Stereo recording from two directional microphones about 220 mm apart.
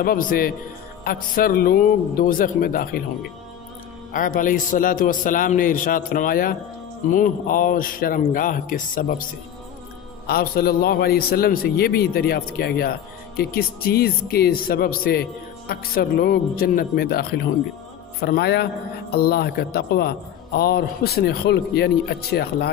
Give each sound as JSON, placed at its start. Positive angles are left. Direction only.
{"t": 0.0, "sound": "a man's voice", "side_deg": 40}
{"t": 4.1, "sound": "a man's voice", "side_deg": 35}